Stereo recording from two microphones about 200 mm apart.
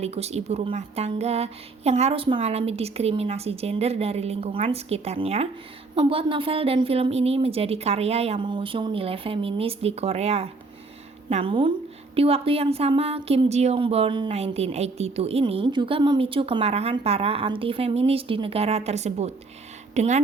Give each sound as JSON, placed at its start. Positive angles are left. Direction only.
{"t": 0.0, "sound": "a woman's voice", "side_deg": -30}